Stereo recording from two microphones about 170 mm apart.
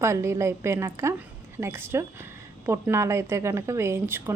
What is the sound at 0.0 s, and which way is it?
Speech, 15° right (ahead or behind).